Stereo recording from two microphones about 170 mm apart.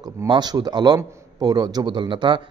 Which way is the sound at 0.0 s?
25° right (ahead or behind).